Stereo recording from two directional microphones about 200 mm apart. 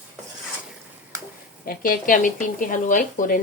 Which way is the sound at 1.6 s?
45° left (ahead or behind).